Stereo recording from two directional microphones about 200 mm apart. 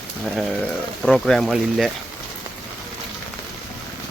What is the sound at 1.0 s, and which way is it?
Speech, centre (ahead or behind).